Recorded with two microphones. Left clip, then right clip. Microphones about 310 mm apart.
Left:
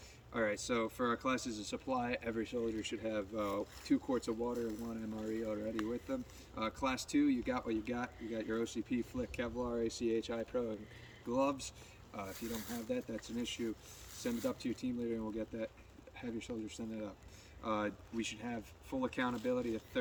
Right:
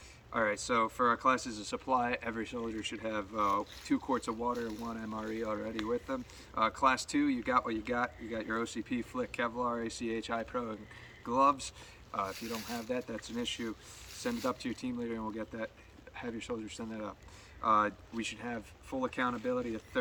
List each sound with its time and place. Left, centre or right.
0.3 s speech: centre
4.5 s speech: centre
4.9 s speech: centre
6.6 s speech: centre
12.3 s speech: centre
12.9 s speech: centre